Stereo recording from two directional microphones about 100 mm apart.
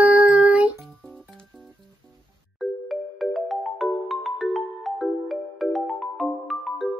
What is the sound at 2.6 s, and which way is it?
Music, centre (ahead or behind).